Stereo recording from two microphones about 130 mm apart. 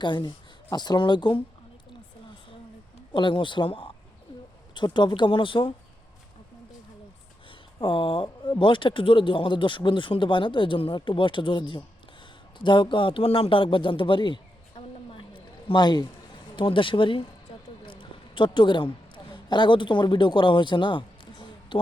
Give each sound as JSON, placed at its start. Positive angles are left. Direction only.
{"t": 0.0, "sound": "speech", "side_deg": 35}
{"t": 3.1, "sound": "speech", "side_deg": 35}
{"t": 7.8, "sound": "speech", "side_deg": 40}
{"t": 15.1, "sound": "a sound", "side_deg": 40}
{"t": 16.6, "sound": "speech", "side_deg": 40}
{"t": 17.8, "sound": "a sound", "side_deg": 40}